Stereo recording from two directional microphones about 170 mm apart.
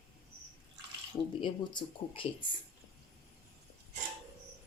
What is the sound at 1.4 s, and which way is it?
Speech, 30° left (ahead or behind).